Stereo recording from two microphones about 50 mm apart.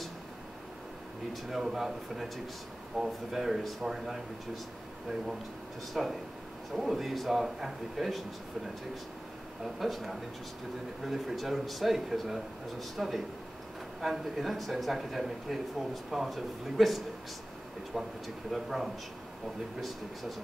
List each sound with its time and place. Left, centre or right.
1.3 s speech: centre
6.0 s speech: centre
9.8 s speech: centre